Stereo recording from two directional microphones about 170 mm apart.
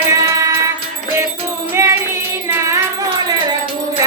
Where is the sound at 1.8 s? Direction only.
15° right (ahead or behind).